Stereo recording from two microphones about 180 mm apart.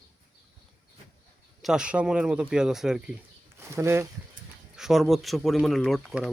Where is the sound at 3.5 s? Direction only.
15° right (ahead or behind).